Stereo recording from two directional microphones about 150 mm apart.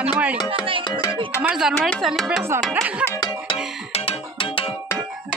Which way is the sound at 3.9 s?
40° left (ahead or behind).